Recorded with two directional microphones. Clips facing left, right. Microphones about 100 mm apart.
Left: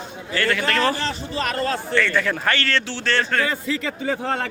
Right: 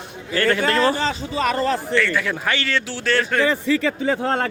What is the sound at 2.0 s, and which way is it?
Speech, 5° right (ahead or behind).